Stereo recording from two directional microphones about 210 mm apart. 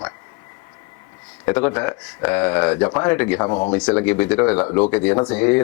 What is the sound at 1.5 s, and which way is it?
Speech, 10° left (ahead or behind).